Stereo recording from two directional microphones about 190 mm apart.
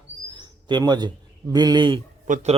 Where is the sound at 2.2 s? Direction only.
40° right (ahead or behind).